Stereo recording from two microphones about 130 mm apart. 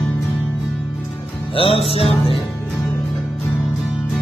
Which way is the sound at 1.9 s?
45° left (ahead or behind).